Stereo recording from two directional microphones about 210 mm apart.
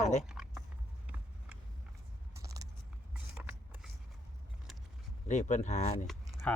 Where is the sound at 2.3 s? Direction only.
15° right (ahead or behind).